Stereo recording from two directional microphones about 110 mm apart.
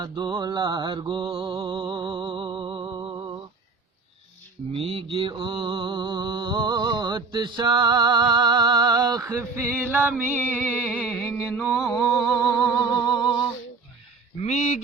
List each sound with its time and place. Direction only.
0.0 s mantra: 40° right (ahead or behind)
4.7 s speech: 60° right (ahead or behind)
5.3 s music: 50° right (ahead or behind)
9.8 s music: 15° right (ahead or behind)
10.8 s music: 10° left (ahead or behind)
11.3 s music: 15° left (ahead or behind)
11.7 s a sound: centre (ahead or behind)
12.4 s music: 35° left (ahead or behind)